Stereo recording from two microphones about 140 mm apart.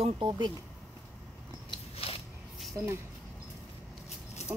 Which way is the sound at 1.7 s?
40° left (ahead or behind).